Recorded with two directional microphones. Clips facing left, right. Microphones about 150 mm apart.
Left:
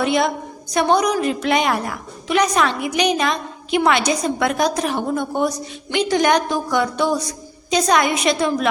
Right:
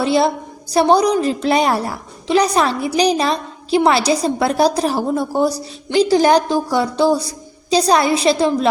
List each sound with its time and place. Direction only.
0.0 s a woman's voice: 30° right (ahead or behind)